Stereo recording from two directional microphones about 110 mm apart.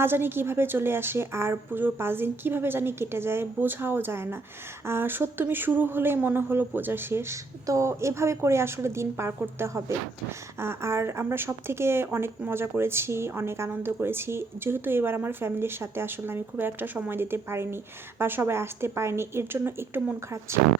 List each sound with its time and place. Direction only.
0.0 s speech: 20° right (ahead or behind)